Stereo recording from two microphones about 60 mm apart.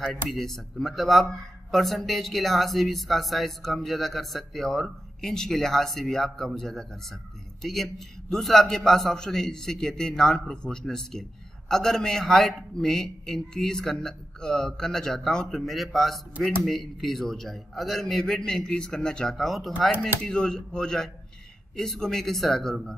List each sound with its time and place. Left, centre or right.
0.0 s a man's voice: centre
20.0 s a man's voice: centre